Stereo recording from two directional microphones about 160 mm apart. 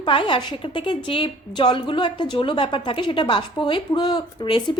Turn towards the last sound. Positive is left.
turn(degrees=30)  # may be behind; listen again after turning